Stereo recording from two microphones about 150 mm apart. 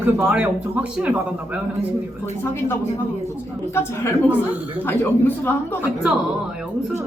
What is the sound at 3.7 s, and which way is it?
Speech, 15° left (ahead or behind).